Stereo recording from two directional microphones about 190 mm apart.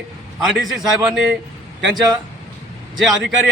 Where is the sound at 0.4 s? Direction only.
Centre (ahead or behind).